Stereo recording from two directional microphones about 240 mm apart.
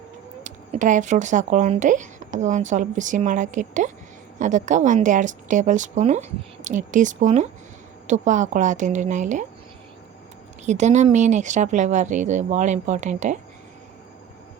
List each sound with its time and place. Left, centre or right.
0.4 s speech: right
10.7 s speech: right